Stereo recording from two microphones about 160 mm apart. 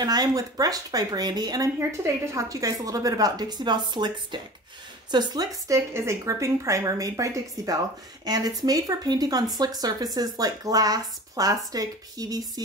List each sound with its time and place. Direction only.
0.0 s speech: 25° right (ahead or behind)